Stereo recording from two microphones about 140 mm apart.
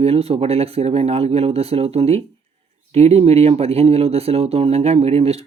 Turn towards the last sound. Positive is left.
turn(degrees=-45)  # may be behind; listen again after turning